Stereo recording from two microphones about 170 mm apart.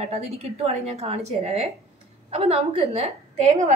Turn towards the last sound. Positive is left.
turn(degrees=-35)  # may be behind; listen again after turning